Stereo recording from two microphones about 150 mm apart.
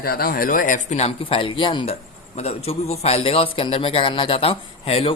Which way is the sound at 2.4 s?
45° left (ahead or behind).